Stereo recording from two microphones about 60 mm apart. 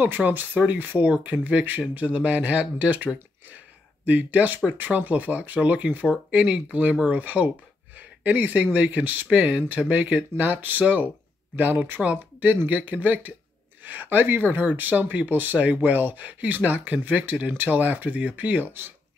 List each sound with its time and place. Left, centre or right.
0.2 s speech: right